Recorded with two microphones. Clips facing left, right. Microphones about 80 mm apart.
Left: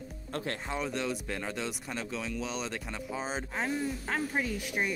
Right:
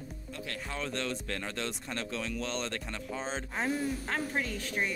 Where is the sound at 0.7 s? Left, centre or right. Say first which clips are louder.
Left 1 dB; centre.